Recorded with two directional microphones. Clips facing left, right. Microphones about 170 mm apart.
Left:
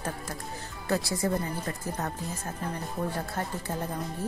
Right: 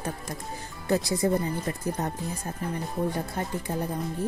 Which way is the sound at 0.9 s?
20° right (ahead or behind).